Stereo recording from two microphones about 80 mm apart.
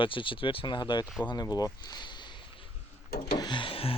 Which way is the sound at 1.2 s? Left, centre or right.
Left.